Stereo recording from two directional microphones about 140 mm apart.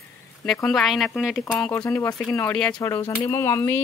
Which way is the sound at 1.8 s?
15° left (ahead or behind).